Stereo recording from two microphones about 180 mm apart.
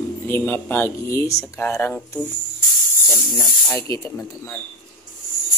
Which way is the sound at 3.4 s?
15° left (ahead or behind).